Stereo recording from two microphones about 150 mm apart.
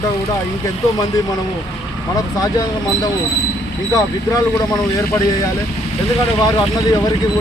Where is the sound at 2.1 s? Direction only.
25° left (ahead or behind).